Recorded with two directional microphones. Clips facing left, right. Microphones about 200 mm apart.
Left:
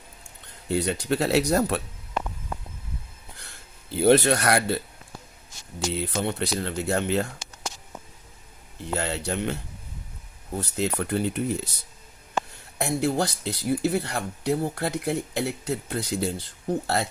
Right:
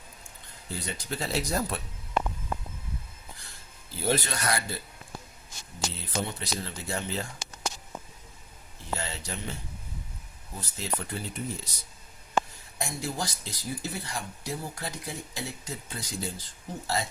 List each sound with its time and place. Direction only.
0.7 s speech: 65° left (ahead or behind)
3.9 s speech: 65° left (ahead or behind)
6.0 s speech: 60° left (ahead or behind)
9.0 s speech: 65° left (ahead or behind)
12.8 s speech: 60° left (ahead or behind)